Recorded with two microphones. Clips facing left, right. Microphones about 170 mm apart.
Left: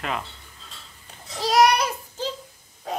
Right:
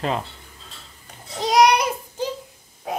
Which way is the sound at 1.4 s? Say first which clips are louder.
Right 2 dB; 20° right (ahead or behind).